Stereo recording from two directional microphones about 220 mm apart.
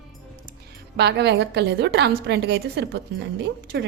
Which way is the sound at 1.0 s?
50° right (ahead or behind).